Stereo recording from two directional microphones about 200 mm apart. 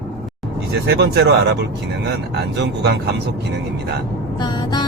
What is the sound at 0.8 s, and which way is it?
Speech, 55° right (ahead or behind).